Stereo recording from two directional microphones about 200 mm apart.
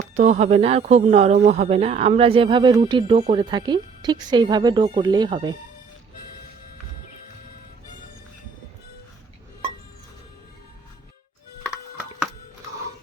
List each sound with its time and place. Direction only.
0.2 s speech: 35° right (ahead or behind)